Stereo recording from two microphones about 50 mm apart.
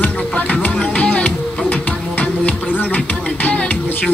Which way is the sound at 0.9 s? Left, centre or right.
Left.